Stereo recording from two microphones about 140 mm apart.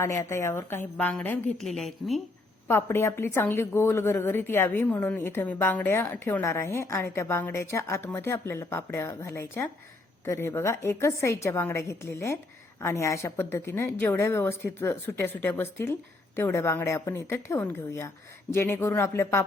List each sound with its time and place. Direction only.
0.0 s a woman's voice: 20° left (ahead or behind); by 2.2 s centre (ahead or behind)
2.6 s a woman's voice: 15° left (ahead or behind)